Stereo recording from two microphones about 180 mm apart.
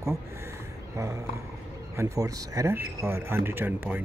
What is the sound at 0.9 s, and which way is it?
Speech, 15° right (ahead or behind).